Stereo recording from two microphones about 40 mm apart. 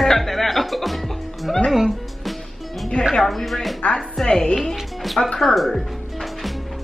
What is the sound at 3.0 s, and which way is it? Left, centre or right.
Music, centre.